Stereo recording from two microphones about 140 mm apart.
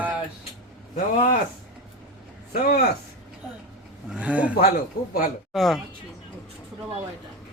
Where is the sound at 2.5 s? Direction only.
90° left.